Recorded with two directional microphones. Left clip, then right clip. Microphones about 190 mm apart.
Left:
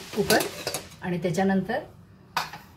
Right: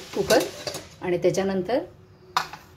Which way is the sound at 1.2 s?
40° right (ahead or behind).